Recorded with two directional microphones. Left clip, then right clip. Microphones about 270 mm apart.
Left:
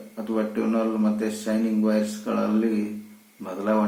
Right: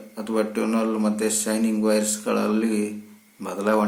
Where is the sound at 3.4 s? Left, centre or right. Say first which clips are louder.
Right 3 dB; right.